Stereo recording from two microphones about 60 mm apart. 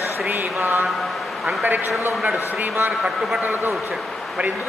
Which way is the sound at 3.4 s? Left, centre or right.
Right.